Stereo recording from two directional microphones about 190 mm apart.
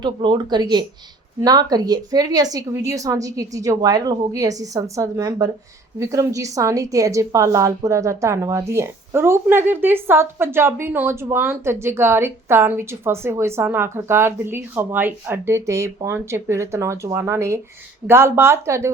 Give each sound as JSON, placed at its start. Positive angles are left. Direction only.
{"t": 0.0, "sound": "a woman's voice", "side_deg": -25}